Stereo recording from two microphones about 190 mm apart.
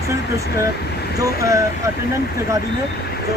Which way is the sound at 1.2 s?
15° right (ahead or behind).